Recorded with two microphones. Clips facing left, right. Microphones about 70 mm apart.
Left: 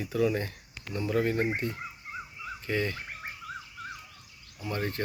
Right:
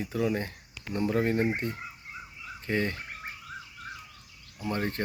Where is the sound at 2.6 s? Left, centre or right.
Right.